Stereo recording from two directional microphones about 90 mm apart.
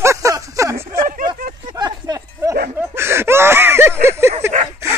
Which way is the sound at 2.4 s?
30° right (ahead or behind).